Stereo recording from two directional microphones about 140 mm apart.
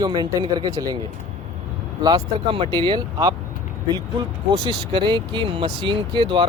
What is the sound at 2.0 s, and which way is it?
Speech, 35° right (ahead or behind).